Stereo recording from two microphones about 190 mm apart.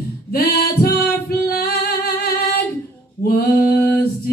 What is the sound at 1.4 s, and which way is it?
Music, 55° left (ahead or behind).